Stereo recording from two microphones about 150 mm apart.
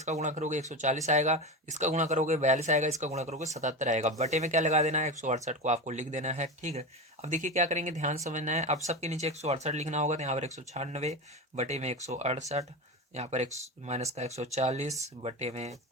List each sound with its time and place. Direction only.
0.0 s speech: 50° right (ahead or behind)